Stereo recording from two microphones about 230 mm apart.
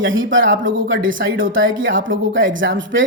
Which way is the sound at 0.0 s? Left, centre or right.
Right.